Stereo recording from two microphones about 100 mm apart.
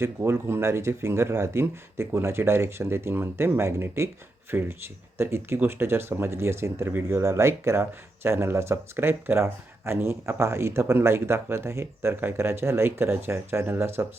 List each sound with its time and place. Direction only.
0.0 s speech: 25° right (ahead or behind)